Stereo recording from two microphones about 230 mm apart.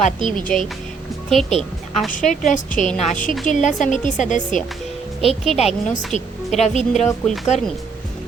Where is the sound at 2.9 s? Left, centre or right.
Centre.